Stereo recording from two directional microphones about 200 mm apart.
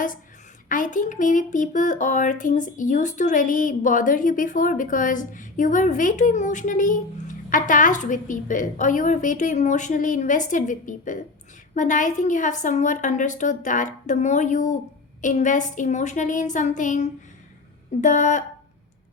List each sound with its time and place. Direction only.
0.7 s speech: 40° left (ahead or behind)